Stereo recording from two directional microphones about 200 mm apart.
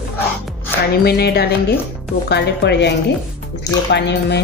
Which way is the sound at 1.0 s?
50° left (ahead or behind).